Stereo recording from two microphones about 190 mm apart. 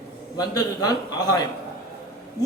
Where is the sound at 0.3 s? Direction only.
20° left (ahead or behind).